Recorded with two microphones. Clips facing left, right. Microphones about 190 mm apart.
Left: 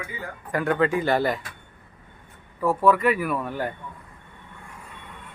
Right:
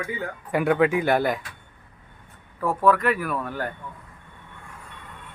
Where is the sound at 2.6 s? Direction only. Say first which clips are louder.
Left 1 dB; 5° left (ahead or behind).